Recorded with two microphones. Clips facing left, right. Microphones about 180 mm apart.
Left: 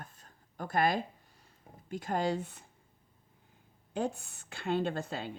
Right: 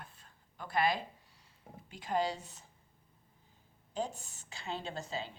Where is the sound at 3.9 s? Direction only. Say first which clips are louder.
Left 4 dB; 60° left (ahead or behind).